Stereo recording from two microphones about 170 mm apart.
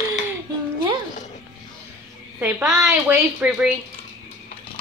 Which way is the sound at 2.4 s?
5° right (ahead or behind).